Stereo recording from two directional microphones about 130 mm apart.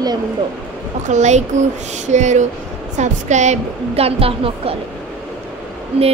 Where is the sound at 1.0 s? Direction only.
65° right (ahead or behind); by 4.7 s 45° right (ahead or behind).